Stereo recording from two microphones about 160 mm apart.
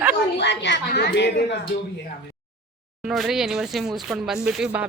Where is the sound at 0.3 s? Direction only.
90° left.